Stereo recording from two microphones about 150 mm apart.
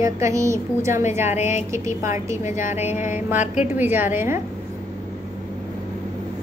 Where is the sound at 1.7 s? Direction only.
20° right (ahead or behind).